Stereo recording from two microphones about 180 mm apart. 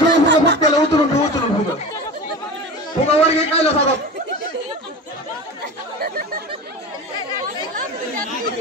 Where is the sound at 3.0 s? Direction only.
35° left (ahead or behind).